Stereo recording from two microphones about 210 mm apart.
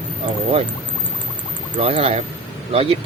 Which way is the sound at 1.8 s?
25° right (ahead or behind).